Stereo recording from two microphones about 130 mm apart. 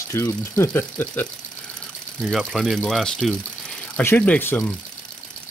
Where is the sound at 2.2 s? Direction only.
Centre (ahead or behind).